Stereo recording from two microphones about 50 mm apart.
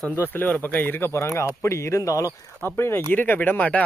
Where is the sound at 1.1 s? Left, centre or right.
Left.